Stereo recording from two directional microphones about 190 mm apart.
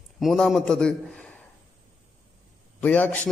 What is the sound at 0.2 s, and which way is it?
A man's voice, centre (ahead or behind).